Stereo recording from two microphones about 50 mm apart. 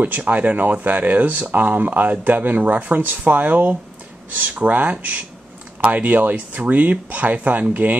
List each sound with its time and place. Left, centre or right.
0.0 s speech: right